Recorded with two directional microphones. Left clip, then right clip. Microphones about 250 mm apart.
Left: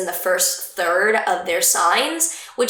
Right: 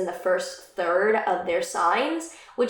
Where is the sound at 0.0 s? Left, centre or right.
Centre.